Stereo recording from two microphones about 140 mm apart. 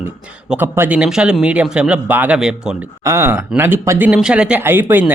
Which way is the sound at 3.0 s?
20° right (ahead or behind).